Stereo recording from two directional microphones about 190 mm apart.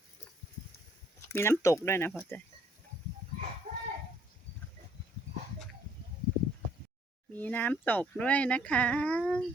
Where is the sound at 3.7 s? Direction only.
45° right (ahead or behind).